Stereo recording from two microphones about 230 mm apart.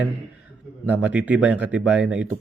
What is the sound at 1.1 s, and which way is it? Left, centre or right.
Speech, centre.